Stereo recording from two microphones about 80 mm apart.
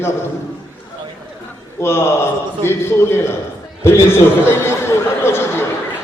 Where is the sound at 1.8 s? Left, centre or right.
Left.